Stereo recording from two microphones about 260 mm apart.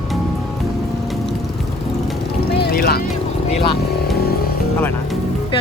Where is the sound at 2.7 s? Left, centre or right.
Left.